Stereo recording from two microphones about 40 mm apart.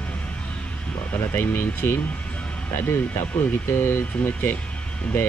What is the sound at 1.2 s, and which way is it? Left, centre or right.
Speech, left.